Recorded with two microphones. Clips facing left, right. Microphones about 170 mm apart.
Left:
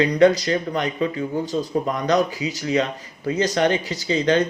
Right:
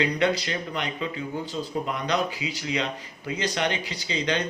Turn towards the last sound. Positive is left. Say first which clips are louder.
# left 8 dB
turn(degrees=45)  # may be behind; listen again after turning